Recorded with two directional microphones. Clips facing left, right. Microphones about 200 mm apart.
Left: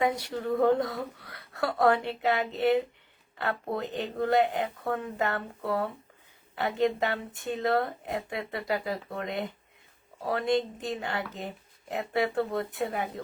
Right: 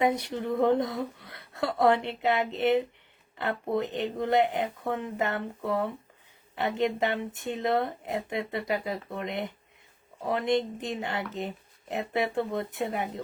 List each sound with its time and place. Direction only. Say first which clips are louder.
0.0 s speech: right 2 dB; 20° right (ahead or behind)